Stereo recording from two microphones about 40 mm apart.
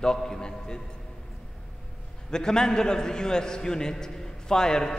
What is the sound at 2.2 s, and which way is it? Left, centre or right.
A man's voice, centre.